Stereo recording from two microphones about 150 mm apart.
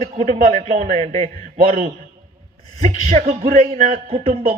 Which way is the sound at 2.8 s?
50° right (ahead or behind).